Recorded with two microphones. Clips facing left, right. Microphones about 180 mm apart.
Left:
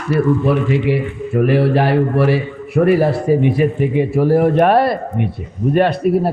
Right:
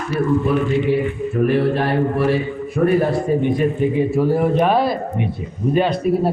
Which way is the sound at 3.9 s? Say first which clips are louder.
Left 3 dB; 70° left (ahead or behind).